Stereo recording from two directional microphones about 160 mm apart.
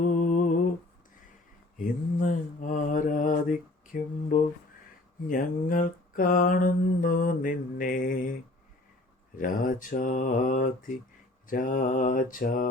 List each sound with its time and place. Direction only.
0.0 s a sound: 50° left (ahead or behind)
1.8 s mantra: 55° left (ahead or behind)
9.4 s mantra: 55° left (ahead or behind)